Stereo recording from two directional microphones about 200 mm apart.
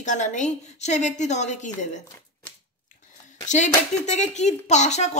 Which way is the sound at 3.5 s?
35° left (ahead or behind).